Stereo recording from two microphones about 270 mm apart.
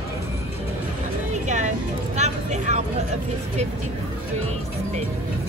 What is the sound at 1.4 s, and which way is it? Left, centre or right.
Music, right.